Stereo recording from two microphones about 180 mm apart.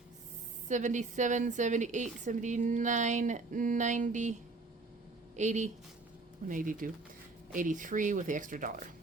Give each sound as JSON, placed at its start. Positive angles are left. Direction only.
{"t": 0.7, "sound": "speech", "side_deg": -45}
{"t": 5.4, "sound": "speech", "side_deg": -40}